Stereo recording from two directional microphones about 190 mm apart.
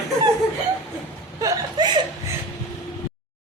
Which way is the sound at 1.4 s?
20° right (ahead or behind).